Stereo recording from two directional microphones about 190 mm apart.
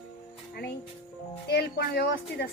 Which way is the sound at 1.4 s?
55° left (ahead or behind).